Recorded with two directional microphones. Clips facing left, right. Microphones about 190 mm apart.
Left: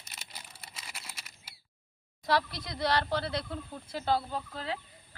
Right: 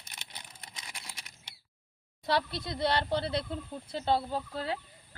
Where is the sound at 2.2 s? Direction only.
25° right (ahead or behind).